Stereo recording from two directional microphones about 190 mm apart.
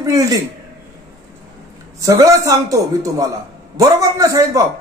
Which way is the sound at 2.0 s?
15° right (ahead or behind).